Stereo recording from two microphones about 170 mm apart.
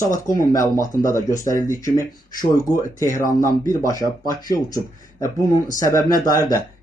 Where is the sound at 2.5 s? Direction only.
20° left (ahead or behind).